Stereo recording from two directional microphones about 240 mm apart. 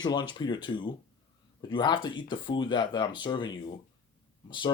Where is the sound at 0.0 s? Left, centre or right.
Centre.